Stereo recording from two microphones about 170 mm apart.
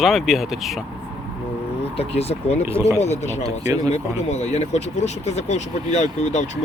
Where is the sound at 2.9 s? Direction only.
40° left (ahead or behind).